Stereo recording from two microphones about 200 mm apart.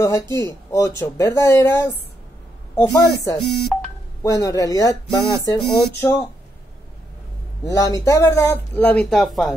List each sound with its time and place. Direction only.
0.0 s speech: 15° left (ahead or behind)
2.9 s speech: 15° left (ahead or behind)
3.3 s speech: centre (ahead or behind)
4.2 s speech: 15° left (ahead or behind)
7.6 s speech: 15° left (ahead or behind); by 9.6 s centre (ahead or behind)